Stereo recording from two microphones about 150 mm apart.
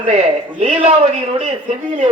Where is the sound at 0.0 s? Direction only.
50° right (ahead or behind).